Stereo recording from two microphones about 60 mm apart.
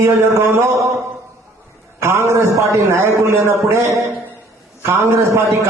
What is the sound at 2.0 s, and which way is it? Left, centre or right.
A man's voice, right.